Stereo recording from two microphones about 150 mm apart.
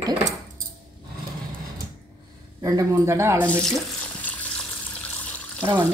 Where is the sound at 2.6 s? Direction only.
20° right (ahead or behind).